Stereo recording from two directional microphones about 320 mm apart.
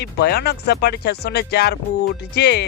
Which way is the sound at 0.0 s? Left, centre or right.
Left.